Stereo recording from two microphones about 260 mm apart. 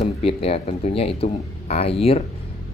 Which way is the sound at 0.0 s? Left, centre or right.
Left.